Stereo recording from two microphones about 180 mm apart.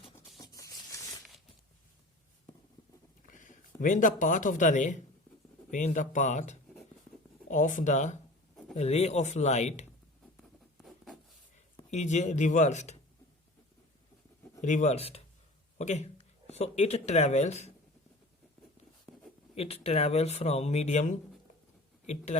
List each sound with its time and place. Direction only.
0.2 s a sound: 20° left (ahead or behind)
3.2 s a sound: 45° left (ahead or behind)
3.8 s speech: 45° left (ahead or behind)
10.8 s writing: centre (ahead or behind)
11.9 s speech: 40° left (ahead or behind)
14.6 s speech: 40° left (ahead or behind)
19.1 s writing: 10° left (ahead or behind)
19.5 s speech: 35° left (ahead or behind)